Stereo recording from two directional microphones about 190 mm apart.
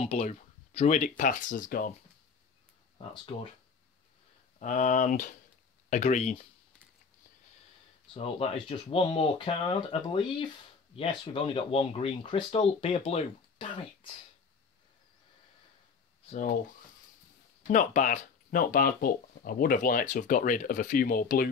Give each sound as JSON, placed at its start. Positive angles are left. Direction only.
{"t": 0.0, "sound": "speech", "side_deg": 35}
{"t": 4.6, "sound": "speech", "side_deg": 40}
{"t": 8.1, "sound": "speech", "side_deg": 30}
{"t": 16.3, "sound": "speech", "side_deg": 40}
{"t": 17.6, "sound": "speech", "side_deg": 40}